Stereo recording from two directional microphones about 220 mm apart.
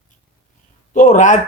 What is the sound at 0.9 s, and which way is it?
Speech, 35° left (ahead or behind).